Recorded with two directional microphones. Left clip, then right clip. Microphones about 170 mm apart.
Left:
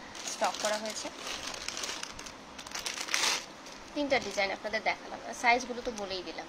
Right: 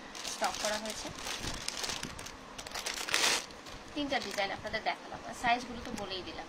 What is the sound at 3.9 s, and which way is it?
A woman's voice, 25° left (ahead or behind).